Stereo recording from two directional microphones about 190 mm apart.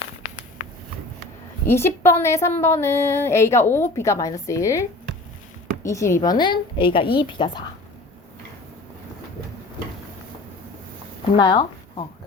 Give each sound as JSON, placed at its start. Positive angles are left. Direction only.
{"t": 1.6, "sound": "a woman's voice", "side_deg": 15}
{"t": 11.3, "sound": "speech", "side_deg": 25}